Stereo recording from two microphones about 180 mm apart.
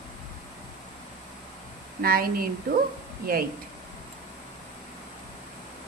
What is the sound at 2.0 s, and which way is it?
Speech, 55° right (ahead or behind).